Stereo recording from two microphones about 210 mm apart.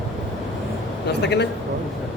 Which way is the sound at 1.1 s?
55° left (ahead or behind).